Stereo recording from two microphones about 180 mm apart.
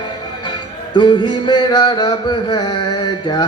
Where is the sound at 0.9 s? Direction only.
25° left (ahead or behind).